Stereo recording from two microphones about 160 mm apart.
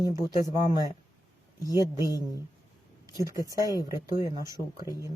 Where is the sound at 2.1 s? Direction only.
20° left (ahead or behind).